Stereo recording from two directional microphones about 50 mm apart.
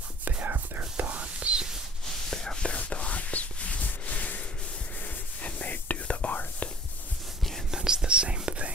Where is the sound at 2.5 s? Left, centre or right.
Left.